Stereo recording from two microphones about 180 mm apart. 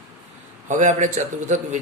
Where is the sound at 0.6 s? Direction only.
45° right (ahead or behind).